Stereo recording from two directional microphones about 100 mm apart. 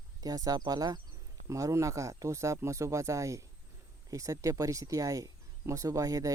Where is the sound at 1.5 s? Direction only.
30° right (ahead or behind).